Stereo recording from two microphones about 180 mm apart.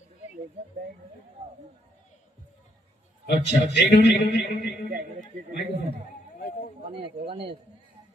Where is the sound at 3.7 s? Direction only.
65° left (ahead or behind).